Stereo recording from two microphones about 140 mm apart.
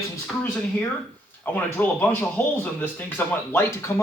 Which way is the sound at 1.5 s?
10° left (ahead or behind).